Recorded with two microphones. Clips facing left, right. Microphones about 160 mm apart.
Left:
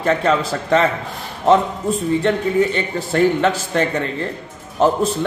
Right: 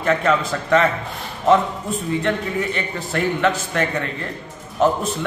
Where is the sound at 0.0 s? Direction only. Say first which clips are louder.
Left 2 dB; 35° left (ahead or behind).